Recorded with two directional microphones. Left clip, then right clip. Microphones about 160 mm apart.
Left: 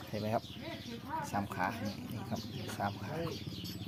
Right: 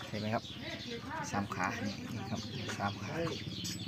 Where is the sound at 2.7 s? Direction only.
5° left (ahead or behind).